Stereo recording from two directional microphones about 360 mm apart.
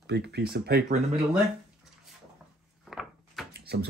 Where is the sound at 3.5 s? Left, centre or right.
Right.